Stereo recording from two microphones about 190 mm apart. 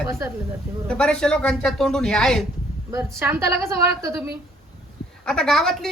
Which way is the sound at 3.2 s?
15° right (ahead or behind).